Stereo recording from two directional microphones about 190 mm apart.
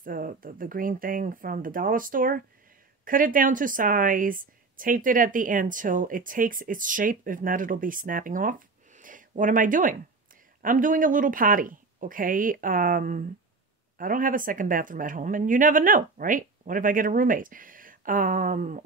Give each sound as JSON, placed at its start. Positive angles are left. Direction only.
{"t": 0.0, "sound": "a woman's voice", "side_deg": -50}